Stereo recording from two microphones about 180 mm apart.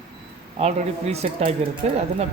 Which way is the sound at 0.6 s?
35° right (ahead or behind).